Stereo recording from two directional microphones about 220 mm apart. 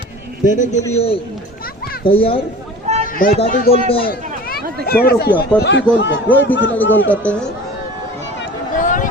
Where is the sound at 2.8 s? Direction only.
30° right (ahead or behind).